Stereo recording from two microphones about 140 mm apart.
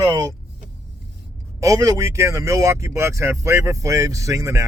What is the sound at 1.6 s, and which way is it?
Speech, 25° right (ahead or behind).